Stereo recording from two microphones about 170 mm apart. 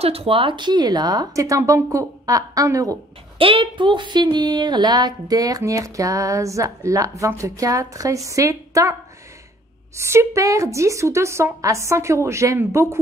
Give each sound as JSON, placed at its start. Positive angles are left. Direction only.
{"t": 0.0, "sound": "speech", "side_deg": -35}
{"t": 3.3, "sound": "speech", "side_deg": -30}
{"t": 9.9, "sound": "a woman's voice", "side_deg": -15}